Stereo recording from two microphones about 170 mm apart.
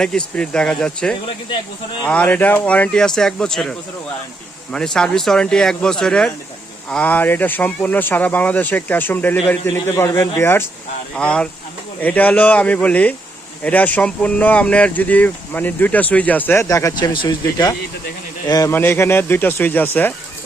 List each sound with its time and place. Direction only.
0.0 s speech: 5° left (ahead or behind)
1.5 s speech: 25° left (ahead or behind)
2.0 s speech: 10° left (ahead or behind)